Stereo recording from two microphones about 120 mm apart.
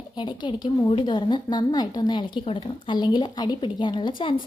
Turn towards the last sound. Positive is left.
turn(degrees=45)  # may be behind; listen again after turning